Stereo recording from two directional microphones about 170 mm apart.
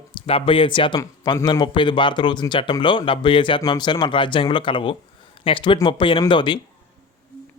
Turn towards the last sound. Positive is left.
turn(degrees=30)  # may be behind; listen again after turning